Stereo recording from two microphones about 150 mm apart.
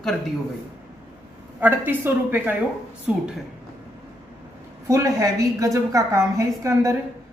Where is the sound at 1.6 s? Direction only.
15° right (ahead or behind).